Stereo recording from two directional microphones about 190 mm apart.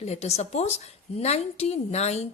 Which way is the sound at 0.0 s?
35° left (ahead or behind).